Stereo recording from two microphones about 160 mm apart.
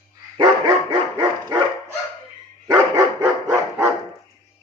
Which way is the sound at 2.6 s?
25° right (ahead or behind).